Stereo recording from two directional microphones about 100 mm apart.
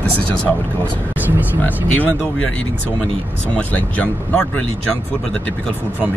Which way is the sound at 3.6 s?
15° left (ahead or behind).